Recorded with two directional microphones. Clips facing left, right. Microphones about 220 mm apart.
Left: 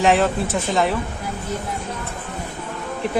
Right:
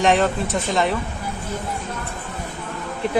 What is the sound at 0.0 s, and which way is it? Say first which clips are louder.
Speech: left 1 dB; centre (ahead or behind).